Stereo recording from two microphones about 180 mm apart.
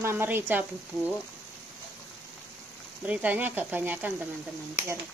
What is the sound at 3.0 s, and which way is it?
Speech, 10° right (ahead or behind).